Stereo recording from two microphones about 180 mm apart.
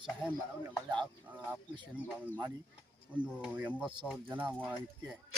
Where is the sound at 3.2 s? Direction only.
5° right (ahead or behind).